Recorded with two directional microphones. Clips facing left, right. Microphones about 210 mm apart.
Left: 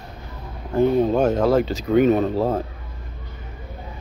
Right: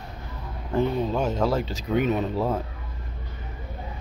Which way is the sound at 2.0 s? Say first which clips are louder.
Left 7 dB; 40° left (ahead or behind).